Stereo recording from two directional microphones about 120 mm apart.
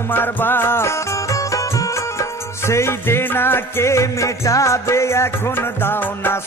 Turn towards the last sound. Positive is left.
turn(degrees=20)  # may be behind; listen again after turning